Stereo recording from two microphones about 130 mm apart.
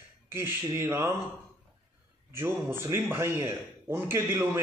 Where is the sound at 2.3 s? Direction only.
15° right (ahead or behind).